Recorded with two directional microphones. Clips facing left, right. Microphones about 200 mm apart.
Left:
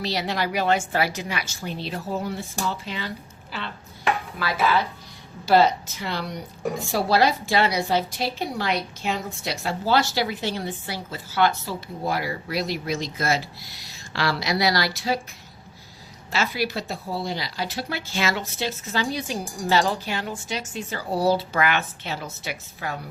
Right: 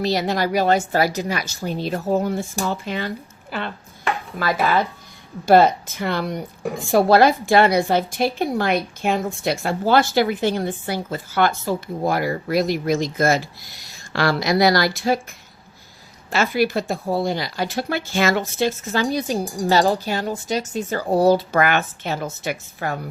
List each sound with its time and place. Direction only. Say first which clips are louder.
0.0 s a woman's voice: right 6 dB; 45° right (ahead or behind)
3.5 s chopping: right 6 dB; 50° right (ahead or behind)
4.4 s a woman's voice: right 5 dB; 50° right (ahead or behind)
16.3 s a woman's voice: right 6 dB; 50° right (ahead or behind)